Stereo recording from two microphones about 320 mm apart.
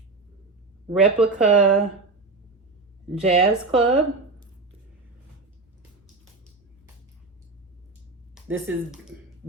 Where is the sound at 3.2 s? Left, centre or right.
Centre.